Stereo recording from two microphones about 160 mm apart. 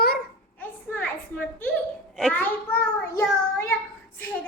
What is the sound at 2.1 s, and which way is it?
Speech, 5° left (ahead or behind).